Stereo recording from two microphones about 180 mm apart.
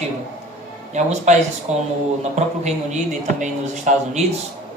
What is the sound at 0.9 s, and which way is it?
A man's voice, 40° right (ahead or behind).